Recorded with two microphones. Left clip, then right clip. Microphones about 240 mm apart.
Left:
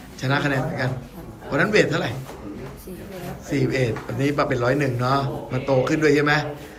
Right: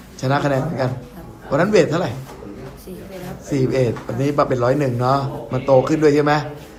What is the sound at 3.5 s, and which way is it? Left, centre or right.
Speech, centre.